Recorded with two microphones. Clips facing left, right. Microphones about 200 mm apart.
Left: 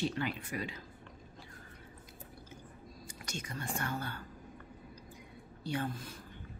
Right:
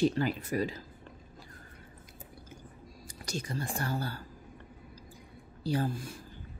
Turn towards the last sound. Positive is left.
turn(degrees=-35)  # may be behind; listen again after turning